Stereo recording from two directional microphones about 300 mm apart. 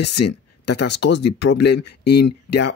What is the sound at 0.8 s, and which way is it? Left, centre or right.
Speech, left.